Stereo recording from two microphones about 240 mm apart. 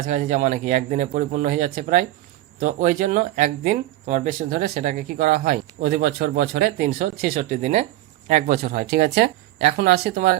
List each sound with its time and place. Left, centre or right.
0.0 s speech: right